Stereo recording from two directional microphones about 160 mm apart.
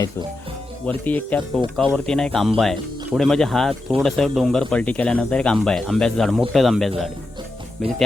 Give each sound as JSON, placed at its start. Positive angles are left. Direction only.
{"t": 0.9, "sound": "speech", "side_deg": 10}